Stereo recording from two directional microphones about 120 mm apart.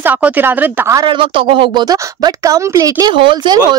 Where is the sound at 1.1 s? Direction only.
45° right (ahead or behind).